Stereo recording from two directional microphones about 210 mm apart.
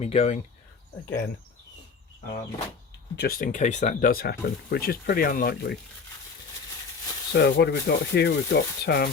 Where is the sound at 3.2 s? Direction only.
45° left (ahead or behind).